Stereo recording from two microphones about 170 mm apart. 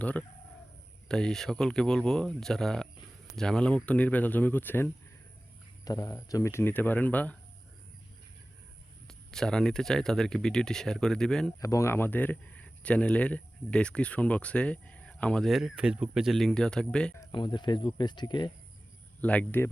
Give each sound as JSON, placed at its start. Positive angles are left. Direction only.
{"t": 0.0, "sound": "speech", "side_deg": 10}
{"t": 9.0, "sound": "speech", "side_deg": 5}
{"t": 11.6, "sound": "speech", "side_deg": 20}
{"t": 17.2, "sound": "speech", "side_deg": 25}
{"t": 19.2, "sound": "speech", "side_deg": 10}